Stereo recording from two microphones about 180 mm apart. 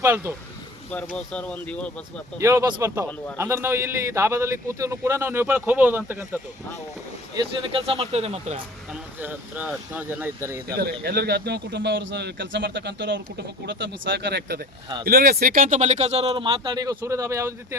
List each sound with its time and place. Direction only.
0.0 s a man's voice: 15° right (ahead or behind)
1.1 s speech: 5° left (ahead or behind)
2.4 s a man's voice: 15° right (ahead or behind)
7.3 s speech: 30° right (ahead or behind)
8.9 s a man's voice: 10° right (ahead or behind)
11.0 s a man's voice: 60° right (ahead or behind); by 17.7 s 15° right (ahead or behind)